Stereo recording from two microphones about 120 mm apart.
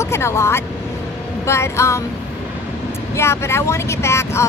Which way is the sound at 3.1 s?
20° left (ahead or behind).